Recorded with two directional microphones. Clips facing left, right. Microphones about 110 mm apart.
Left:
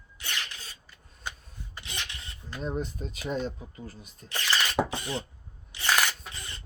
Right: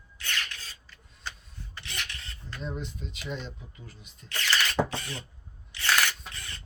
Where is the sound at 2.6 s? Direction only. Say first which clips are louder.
Left 5 dB; 40° left (ahead or behind).